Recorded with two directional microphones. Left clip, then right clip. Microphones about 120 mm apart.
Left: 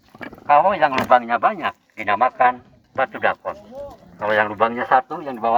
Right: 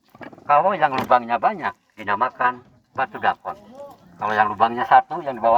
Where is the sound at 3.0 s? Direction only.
15° right (ahead or behind); by 5.5 s 35° right (ahead or behind).